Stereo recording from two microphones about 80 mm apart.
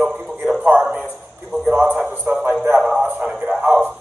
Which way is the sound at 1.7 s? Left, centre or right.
Right.